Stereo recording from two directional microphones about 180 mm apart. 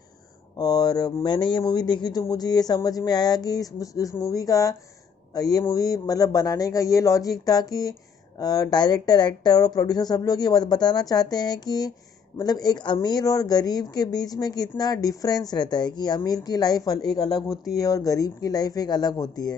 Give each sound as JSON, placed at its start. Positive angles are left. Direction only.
{"t": 0.5, "sound": "speech", "side_deg": 20}